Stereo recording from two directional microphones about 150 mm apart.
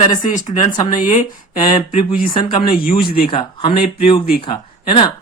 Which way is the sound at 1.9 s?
40° left (ahead or behind).